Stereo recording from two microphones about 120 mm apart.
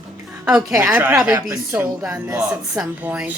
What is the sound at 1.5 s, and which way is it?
Speech, 10° right (ahead or behind).